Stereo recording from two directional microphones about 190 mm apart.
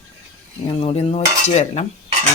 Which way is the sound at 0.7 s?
30° left (ahead or behind).